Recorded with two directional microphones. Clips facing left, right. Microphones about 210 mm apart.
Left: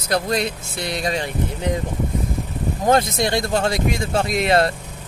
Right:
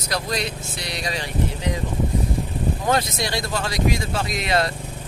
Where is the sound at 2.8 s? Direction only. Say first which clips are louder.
Left 7 dB; 50° left (ahead or behind).